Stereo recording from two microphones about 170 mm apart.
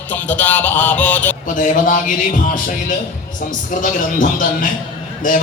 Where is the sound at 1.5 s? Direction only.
50° left (ahead or behind).